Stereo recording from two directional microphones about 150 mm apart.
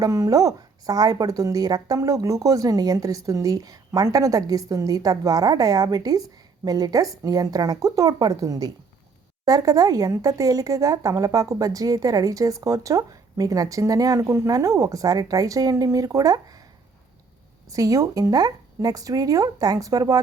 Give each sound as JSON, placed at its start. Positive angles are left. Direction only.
{"t": 0.0, "sound": "speech", "side_deg": -25}
{"t": 17.7, "sound": "speech", "side_deg": -20}